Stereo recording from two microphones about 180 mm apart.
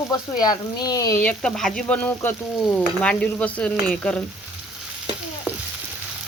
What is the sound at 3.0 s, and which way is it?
Speech, 5° left (ahead or behind).